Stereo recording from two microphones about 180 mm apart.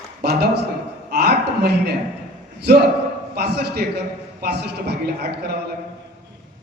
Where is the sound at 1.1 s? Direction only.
60° right (ahead or behind).